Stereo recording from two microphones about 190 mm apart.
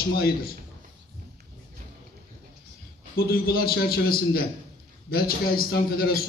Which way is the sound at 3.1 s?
55° left (ahead or behind).